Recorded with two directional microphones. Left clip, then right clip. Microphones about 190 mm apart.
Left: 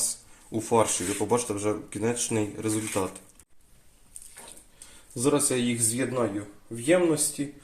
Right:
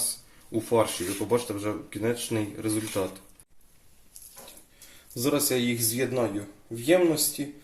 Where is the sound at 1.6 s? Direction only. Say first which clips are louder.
Left 1 dB; 40° left (ahead or behind).